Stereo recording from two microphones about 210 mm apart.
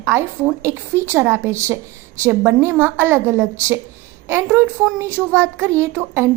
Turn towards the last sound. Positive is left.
turn(degrees=-10)  # may be behind; listen again after turning